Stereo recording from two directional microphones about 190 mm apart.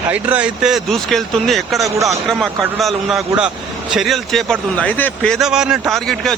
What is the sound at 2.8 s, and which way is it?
A man's voice, centre (ahead or behind).